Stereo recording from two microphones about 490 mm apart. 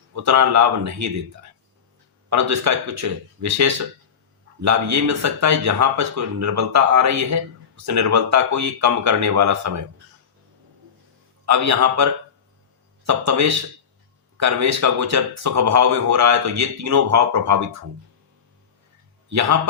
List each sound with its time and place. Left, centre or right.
0.1 s speech: right
11.4 s speech: right
13.1 s speech: right
19.3 s a man's voice: right